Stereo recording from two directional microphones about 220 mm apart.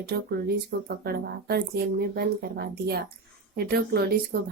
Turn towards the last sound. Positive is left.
turn(degrees=-45)  # may be behind; listen again after turning